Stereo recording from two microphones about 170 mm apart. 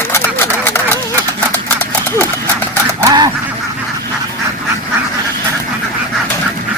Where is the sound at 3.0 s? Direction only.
20° right (ahead or behind).